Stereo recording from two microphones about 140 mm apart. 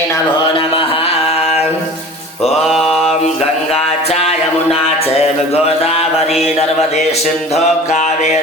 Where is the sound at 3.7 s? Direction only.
45° left (ahead or behind).